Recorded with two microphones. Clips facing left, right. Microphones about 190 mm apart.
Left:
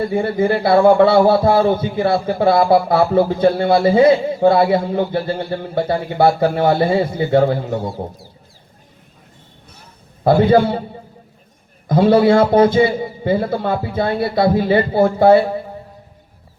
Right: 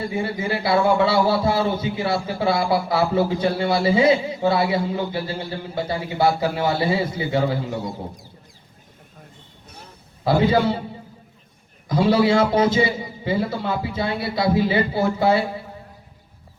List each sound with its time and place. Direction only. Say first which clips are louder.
0.0 s a man's voice: left 8 dB; 55° left (ahead or behind)
10.2 s a man's voice: left 6 dB; 55° left (ahead or behind)
11.9 s a man's voice: left 6 dB; 55° left (ahead or behind)